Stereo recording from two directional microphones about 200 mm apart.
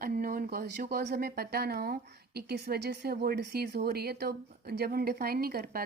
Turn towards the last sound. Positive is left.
turn(degrees=-50)  # may be behind; listen again after turning